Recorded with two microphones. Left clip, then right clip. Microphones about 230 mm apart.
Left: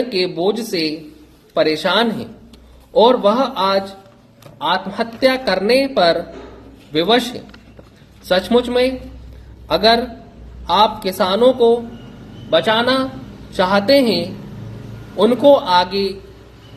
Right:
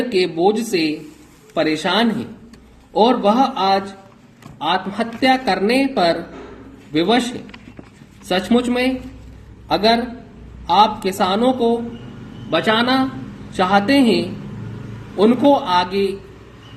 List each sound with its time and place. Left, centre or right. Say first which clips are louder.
0.1 s speech: right 2 dB; left
15.4 s speech: left 4 dB; left